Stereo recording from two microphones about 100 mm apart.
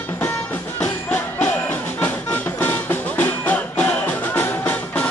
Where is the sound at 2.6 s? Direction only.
20° left (ahead or behind).